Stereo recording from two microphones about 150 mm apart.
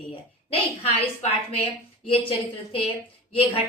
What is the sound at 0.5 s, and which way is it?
A woman's voice, 40° left (ahead or behind).